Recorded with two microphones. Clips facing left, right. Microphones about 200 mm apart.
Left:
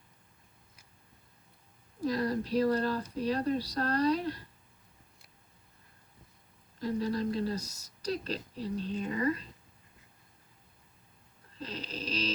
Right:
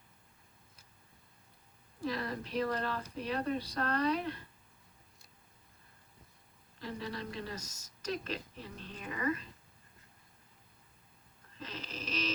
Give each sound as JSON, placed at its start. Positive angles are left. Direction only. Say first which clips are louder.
{"t": 2.0, "sound": "a woman's voice", "louder": "left 7 dB", "side_deg": 40}
{"t": 6.7, "sound": "a woman's voice", "louder": "left 9 dB", "side_deg": 40}
{"t": 11.5, "sound": "a sound", "louder": "left 4 dB", "side_deg": 35}